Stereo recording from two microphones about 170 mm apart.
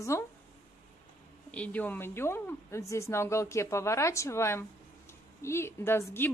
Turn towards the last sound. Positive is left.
turn(degrees=15)  # may be behind; listen again after turning